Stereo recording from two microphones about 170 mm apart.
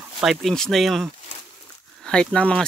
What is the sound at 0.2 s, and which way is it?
Speech, centre (ahead or behind).